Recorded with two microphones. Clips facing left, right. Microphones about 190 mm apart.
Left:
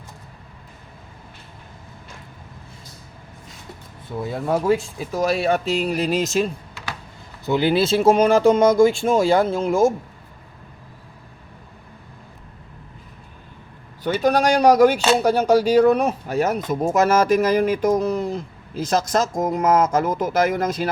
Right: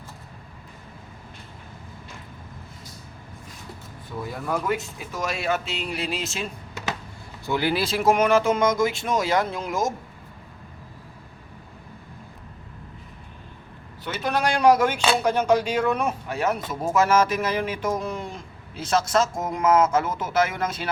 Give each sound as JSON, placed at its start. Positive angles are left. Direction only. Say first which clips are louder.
{"t": 4.2, "sound": "speech", "louder": "left 6 dB", "side_deg": 25}
{"t": 7.4, "sound": "speech", "louder": "left 6 dB", "side_deg": 20}
{"t": 14.0, "sound": "speech", "louder": "left 7 dB", "side_deg": 40}